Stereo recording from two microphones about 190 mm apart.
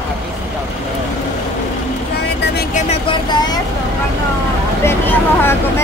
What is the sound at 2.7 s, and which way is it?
Speech, 35° left (ahead or behind).